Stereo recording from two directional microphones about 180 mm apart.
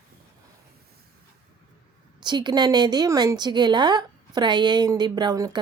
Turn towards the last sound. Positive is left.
turn(degrees=-20)  # may be behind; listen again after turning